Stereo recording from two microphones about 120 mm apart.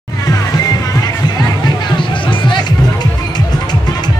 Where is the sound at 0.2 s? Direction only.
30° left (ahead or behind).